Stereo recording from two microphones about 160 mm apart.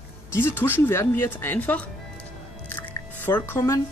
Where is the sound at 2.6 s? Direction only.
10° left (ahead or behind).